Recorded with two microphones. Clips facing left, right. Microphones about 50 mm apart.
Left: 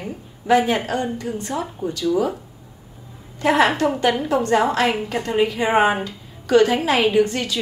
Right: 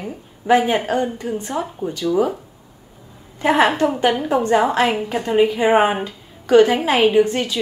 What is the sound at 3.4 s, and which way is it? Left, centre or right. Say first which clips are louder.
A woman's voice: right 1 dB; right.